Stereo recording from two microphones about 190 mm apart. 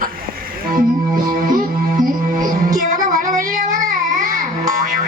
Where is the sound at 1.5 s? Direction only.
45° right (ahead or behind).